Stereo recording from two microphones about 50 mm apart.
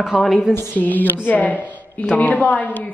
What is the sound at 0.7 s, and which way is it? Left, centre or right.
A woman's voice, left.